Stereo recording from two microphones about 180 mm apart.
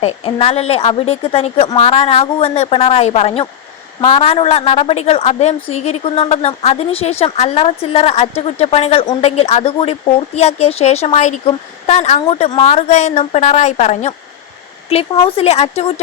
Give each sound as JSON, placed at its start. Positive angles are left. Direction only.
{"t": 0.0, "sound": "a woman's voice", "side_deg": 30}